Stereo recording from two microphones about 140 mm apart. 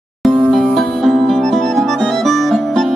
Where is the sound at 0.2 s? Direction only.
Centre (ahead or behind).